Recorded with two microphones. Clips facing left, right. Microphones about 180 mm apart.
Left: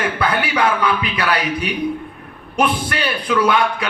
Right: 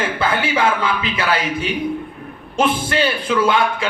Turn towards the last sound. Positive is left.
turn(degrees=-25)  # may be behind; listen again after turning